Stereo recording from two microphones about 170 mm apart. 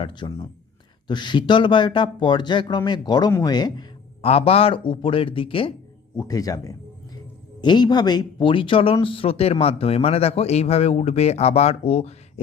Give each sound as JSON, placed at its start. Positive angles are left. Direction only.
{"t": 0.0, "sound": "speech", "side_deg": 25}
{"t": 4.3, "sound": "speech", "side_deg": 35}
{"t": 6.1, "sound": "speech", "side_deg": 20}